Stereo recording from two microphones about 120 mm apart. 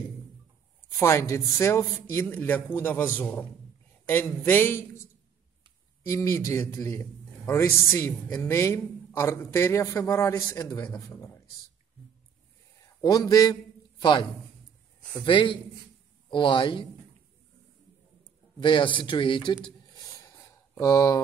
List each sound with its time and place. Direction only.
0.8 s a man's voice: 25° left (ahead or behind)
6.0 s speech: 25° left (ahead or behind)
13.0 s a man's voice: 35° left (ahead or behind)
15.2 s a man's voice: 45° left (ahead or behind)
18.6 s speech: 45° left (ahead or behind)